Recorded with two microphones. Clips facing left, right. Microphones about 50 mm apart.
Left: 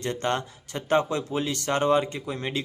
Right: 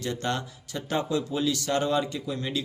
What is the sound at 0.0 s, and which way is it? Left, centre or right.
Speech, left.